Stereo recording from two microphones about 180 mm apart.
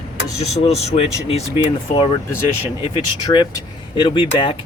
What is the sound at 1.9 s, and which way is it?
Speech, 25° left (ahead or behind).